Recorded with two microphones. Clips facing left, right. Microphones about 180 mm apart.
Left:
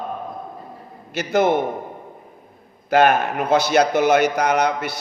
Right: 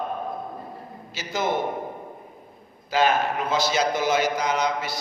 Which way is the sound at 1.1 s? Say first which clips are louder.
Left 9 dB; 65° left (ahead or behind).